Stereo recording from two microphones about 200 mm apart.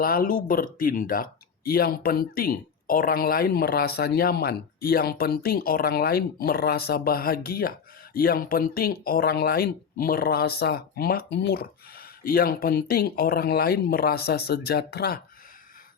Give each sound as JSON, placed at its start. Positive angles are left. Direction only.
{"t": 0.0, "sound": "speech", "side_deg": 45}